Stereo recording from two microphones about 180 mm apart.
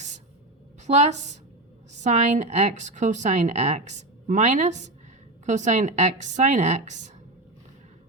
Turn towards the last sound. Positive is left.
turn(degrees=-40)  # may be behind; listen again after turning